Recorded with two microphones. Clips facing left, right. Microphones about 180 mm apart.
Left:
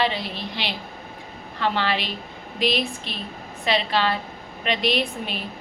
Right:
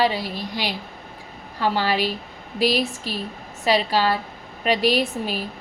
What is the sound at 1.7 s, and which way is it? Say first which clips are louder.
A woman's voice: right 3 dB; 40° right (ahead or behind).